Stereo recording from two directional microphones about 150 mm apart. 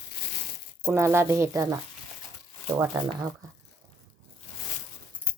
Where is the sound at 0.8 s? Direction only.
15° right (ahead or behind).